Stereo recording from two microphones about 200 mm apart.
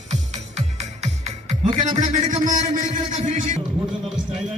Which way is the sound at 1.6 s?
30° right (ahead or behind).